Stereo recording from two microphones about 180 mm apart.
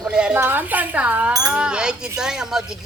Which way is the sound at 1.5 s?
5° right (ahead or behind).